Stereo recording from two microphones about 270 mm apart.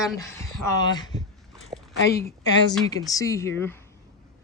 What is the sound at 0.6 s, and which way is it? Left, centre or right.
Speech, centre.